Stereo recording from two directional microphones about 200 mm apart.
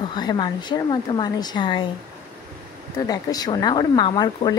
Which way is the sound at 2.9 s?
20° left (ahead or behind).